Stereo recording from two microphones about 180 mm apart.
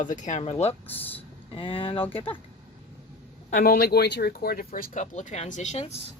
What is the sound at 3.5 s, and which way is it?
Speech, 60° left (ahead or behind).